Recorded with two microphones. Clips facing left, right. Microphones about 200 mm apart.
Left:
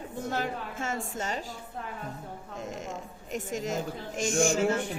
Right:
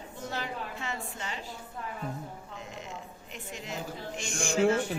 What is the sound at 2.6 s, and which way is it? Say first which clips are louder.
A woman's voice: left 7 dB; 45° left (ahead or behind).